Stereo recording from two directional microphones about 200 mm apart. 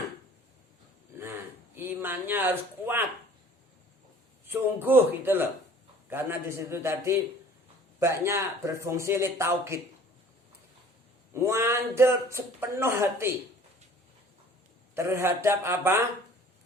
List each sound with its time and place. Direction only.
1.1 s a sound: 10° right (ahead or behind)
4.4 s speech: 10° right (ahead or behind)
11.3 s speech: 15° right (ahead or behind)
14.9 s speech: 15° right (ahead or behind)